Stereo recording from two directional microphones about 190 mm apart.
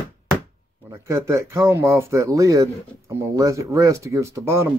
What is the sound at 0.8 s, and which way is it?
Speech, 15° right (ahead or behind).